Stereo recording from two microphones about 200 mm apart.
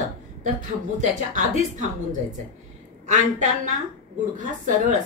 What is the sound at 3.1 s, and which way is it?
A woman's voice, 40° right (ahead or behind).